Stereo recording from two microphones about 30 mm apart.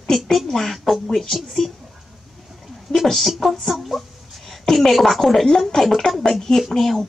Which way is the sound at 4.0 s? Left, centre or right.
Centre.